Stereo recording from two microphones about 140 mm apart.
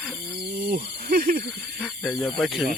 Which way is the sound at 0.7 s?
85° right.